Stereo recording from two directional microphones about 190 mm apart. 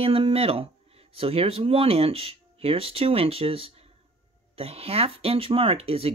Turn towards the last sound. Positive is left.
turn(degrees=-30)  # may be behind; listen again after turning